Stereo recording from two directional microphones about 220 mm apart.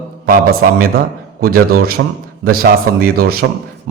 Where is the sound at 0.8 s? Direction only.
45° right (ahead or behind).